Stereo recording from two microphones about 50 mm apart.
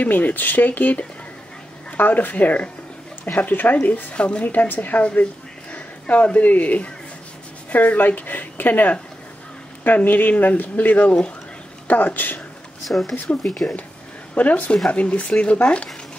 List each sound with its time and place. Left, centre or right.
0.0 s speech: left
4.1 s speech: left
4.5 s speech: left
12.8 s speech: centre
14.3 s speech: left